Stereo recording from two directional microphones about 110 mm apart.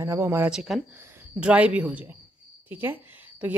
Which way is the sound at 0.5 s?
5° right (ahead or behind).